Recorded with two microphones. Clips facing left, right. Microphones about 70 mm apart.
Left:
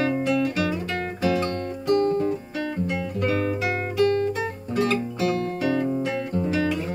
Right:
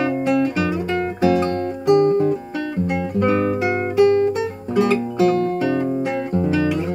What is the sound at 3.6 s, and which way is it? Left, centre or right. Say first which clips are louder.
Music: right 6 dB; centre.